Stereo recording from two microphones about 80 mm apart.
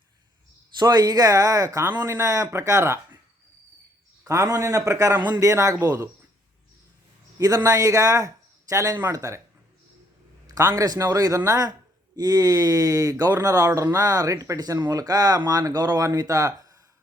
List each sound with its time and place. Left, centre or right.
0.8 s speech: right
4.3 s speech: right
7.3 s speech: right
10.4 s speech: right
12.1 s speech: right